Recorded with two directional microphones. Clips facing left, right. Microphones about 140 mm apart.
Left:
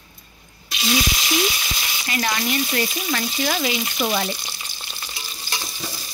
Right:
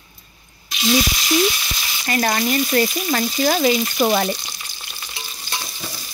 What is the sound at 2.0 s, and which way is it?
Frying, 45° right (ahead or behind).